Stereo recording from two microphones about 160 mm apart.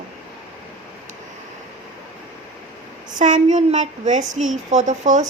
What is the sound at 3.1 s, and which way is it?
A woman's voice, 50° right (ahead or behind).